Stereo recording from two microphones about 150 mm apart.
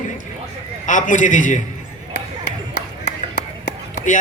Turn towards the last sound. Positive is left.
turn(degrees=60)  # may be behind; listen again after turning